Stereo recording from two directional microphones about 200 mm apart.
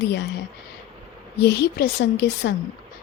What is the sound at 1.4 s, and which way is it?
Speech, 55° left (ahead or behind).